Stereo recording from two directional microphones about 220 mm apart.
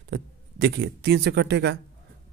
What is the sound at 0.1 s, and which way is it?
Speech, 50° right (ahead or behind).